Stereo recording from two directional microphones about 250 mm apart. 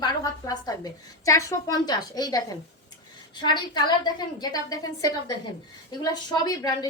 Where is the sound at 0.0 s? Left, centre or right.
Centre.